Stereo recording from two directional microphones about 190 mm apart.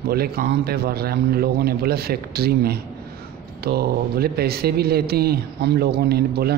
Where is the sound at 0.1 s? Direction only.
55° right (ahead or behind).